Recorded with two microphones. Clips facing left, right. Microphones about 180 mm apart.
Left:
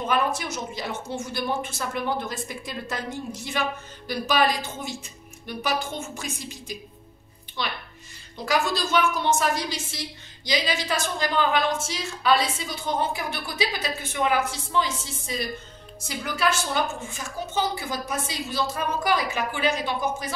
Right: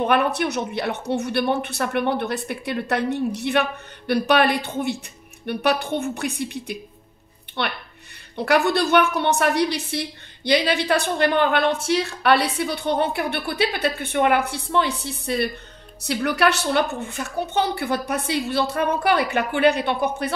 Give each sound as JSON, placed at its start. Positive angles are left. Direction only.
{"t": 0.0, "sound": "a woman's voice", "side_deg": -65}